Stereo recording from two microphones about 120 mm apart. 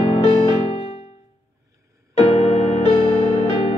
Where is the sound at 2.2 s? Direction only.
60° left (ahead or behind).